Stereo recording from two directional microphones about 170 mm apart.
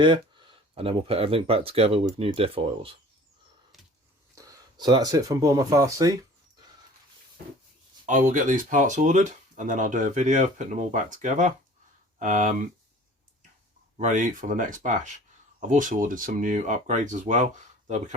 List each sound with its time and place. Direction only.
0.0 s speech: 30° right (ahead or behind)
4.4 s speech: 20° right (ahead or behind)
8.0 s speech: 45° right (ahead or behind)
14.0 s speech: 50° right (ahead or behind)